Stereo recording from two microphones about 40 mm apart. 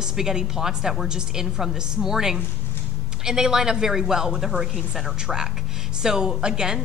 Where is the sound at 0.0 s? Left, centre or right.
Centre.